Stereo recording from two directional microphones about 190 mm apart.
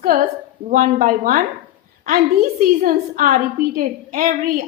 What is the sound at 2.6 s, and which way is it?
A woman's voice, 45° right (ahead or behind).